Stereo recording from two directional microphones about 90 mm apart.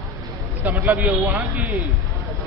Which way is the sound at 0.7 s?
15° right (ahead or behind).